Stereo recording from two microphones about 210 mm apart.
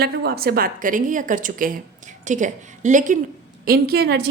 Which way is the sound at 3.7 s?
45° right (ahead or behind).